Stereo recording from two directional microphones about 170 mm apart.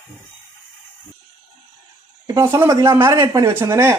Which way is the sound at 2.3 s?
15° right (ahead or behind).